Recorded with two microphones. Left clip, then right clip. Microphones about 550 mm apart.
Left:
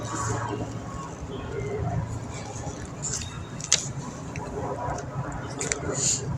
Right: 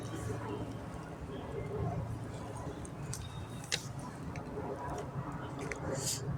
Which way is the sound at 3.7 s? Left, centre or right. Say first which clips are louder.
Left 12 dB; right.